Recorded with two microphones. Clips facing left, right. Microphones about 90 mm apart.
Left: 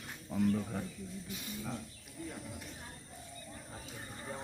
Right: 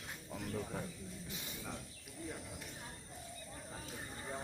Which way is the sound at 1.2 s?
20° right (ahead or behind).